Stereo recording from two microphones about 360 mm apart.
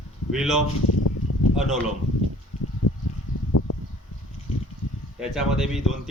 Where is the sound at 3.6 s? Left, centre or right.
Left.